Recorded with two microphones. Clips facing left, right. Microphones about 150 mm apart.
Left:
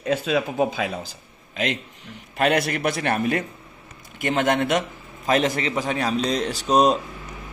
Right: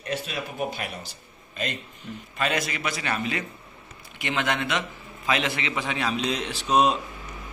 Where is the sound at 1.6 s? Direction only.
90° left.